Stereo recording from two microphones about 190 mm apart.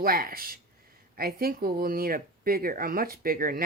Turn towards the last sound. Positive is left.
turn(degrees=-50)  # may be behind; listen again after turning